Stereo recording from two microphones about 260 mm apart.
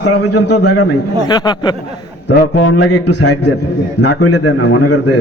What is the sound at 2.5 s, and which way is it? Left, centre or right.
A man's voice, left.